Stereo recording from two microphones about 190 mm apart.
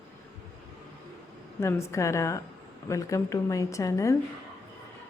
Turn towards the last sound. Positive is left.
turn(degrees=15)  # may be behind; listen again after turning